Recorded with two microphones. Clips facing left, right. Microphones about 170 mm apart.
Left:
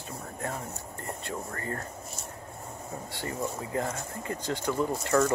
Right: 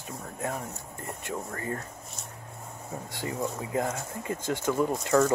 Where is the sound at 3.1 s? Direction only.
15° right (ahead or behind).